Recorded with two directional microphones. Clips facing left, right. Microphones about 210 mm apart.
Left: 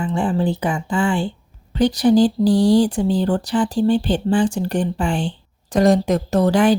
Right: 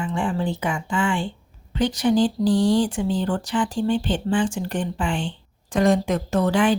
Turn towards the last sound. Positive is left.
turn(degrees=40)  # may be behind; listen again after turning